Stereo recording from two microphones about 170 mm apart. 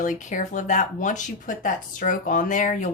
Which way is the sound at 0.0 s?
45° left (ahead or behind).